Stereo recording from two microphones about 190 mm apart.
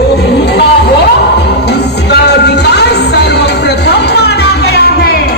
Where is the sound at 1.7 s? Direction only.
60° left (ahead or behind).